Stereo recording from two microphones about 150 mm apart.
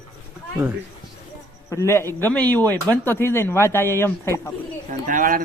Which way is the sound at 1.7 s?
20° left (ahead or behind).